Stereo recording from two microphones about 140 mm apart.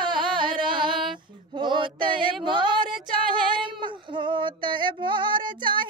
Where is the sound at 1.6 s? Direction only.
35° right (ahead or behind).